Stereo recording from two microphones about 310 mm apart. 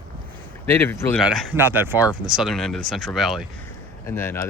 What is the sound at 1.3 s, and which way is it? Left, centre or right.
Speech, centre.